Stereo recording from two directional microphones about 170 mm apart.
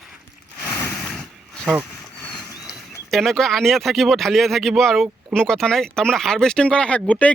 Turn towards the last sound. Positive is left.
turn(degrees=10)  # may be behind; listen again after turning